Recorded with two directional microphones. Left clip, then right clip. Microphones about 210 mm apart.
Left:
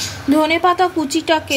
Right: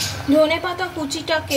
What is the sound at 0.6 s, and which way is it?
Speech, 40° left (ahead or behind).